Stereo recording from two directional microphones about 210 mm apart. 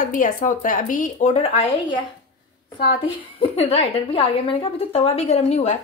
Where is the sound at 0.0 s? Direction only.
40° left (ahead or behind).